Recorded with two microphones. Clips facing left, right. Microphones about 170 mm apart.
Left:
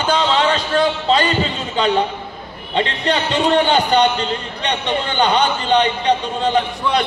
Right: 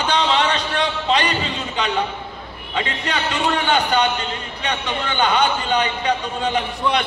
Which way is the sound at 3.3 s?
35° left (ahead or behind).